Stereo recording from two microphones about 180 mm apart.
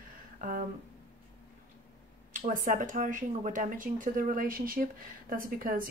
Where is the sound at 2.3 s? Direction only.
45° right (ahead or behind).